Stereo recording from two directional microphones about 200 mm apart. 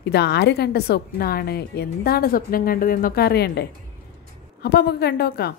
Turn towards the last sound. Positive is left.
turn(degrees=55)  # may be behind; listen again after turning